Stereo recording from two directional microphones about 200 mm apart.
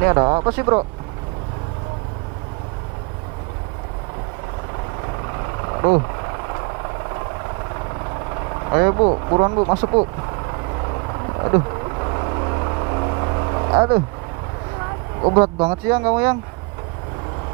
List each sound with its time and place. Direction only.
0.0 s speech: 20° right (ahead or behind)
5.8 s speech: 25° right (ahead or behind)
8.6 s vehicle: 20° right (ahead or behind)
11.4 s vehicle: 25° right (ahead or behind)
15.3 s speech: 20° right (ahead or behind)